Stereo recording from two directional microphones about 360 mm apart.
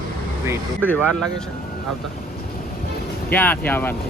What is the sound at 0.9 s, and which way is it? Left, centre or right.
Speech, centre.